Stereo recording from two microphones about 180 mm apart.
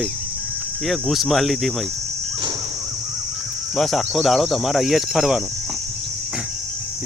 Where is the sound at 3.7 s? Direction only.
Centre (ahead or behind).